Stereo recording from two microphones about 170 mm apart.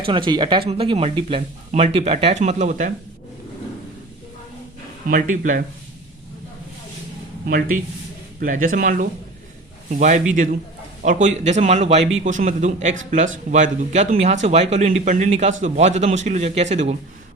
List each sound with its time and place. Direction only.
0.0 s speech: 30° right (ahead or behind); by 2.9 s 45° right (ahead or behind)
5.0 s a man's voice: 50° right (ahead or behind)
8.4 s a man's voice: 50° right (ahead or behind)